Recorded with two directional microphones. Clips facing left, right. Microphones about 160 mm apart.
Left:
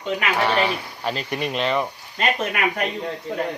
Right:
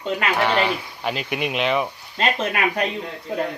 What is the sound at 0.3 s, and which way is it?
Speech, centre (ahead or behind).